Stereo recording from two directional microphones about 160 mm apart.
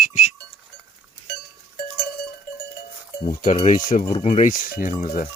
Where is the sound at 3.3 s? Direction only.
50° left (ahead or behind).